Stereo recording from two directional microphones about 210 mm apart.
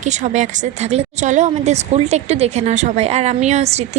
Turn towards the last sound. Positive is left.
turn(degrees=-30)  # may be behind; listen again after turning